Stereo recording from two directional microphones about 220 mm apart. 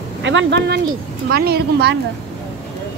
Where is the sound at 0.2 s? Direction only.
55° right (ahead or behind).